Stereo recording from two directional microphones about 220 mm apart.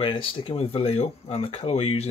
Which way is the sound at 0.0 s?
25° left (ahead or behind).